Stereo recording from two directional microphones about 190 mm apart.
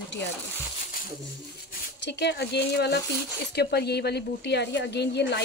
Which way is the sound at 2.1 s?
65° left (ahead or behind).